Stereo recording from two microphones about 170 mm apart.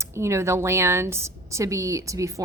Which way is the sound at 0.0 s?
15° right (ahead or behind).